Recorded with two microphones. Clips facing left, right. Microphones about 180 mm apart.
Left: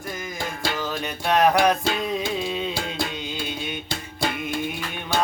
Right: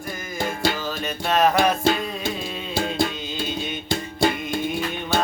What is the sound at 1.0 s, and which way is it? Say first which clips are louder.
Music: even; 15° left (ahead or behind).